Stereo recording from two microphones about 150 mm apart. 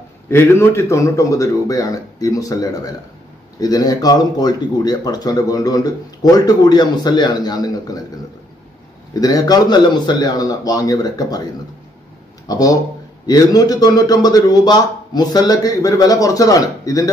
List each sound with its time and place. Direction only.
0.3 s speech: 15° left (ahead or behind)
9.1 s speech: 25° left (ahead or behind)
12.4 s speech: 25° left (ahead or behind)